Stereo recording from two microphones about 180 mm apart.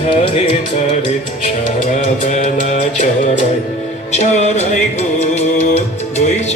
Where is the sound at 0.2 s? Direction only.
35° left (ahead or behind).